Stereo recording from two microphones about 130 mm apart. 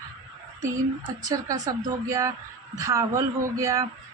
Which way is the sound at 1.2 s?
30° right (ahead or behind).